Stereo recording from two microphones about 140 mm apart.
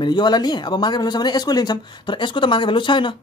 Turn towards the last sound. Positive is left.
turn(degrees=35)  # may be behind; listen again after turning